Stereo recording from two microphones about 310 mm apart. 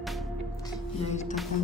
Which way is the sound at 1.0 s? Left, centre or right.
Left.